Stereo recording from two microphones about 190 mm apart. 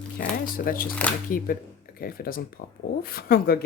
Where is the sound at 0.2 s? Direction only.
50° left (ahead or behind).